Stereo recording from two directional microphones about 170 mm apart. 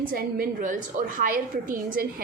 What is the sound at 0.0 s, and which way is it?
A woman's voice, 55° right (ahead or behind).